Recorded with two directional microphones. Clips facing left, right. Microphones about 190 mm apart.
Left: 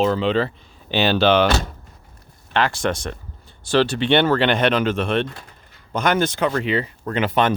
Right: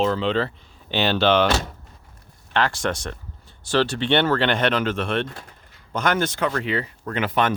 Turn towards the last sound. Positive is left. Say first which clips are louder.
# left 3 dB
turn(degrees=25)  # may be behind; listen again after turning